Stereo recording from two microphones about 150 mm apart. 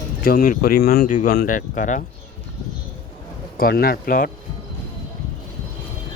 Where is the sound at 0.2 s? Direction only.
75° left (ahead or behind); by 2.0 s 60° left (ahead or behind).